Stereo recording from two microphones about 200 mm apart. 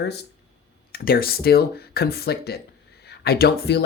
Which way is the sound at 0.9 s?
50° left (ahead or behind).